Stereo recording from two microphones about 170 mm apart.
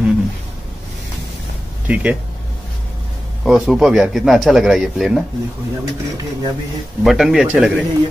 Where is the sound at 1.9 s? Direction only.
5° right (ahead or behind).